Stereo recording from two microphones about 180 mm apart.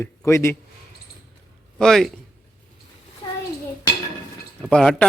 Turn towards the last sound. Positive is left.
turn(degrees=5)  # may be behind; listen again after turning